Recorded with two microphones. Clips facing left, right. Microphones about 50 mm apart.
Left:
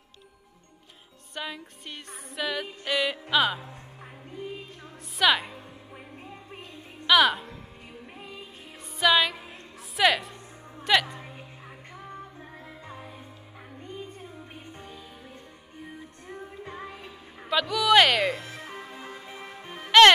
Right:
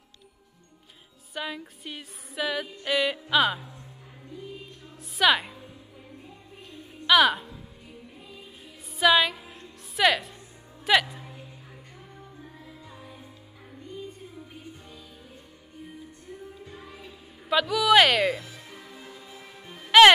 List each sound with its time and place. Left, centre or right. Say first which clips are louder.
1.3 s music: right 2 dB; centre
4.3 s music: left 3 dB; left
5.1 s music: right 1 dB; centre
6.7 s music: even; centre
9.0 s music: right 1 dB; centre
9.9 s a woman's voice: even; centre
10.8 s music: right 1 dB; centre
11.1 s music: left 2 dB; left
16.3 s music: left 4 dB; left
17.5 s speech: right 1 dB; centre
18.4 s music: left 5 dB; left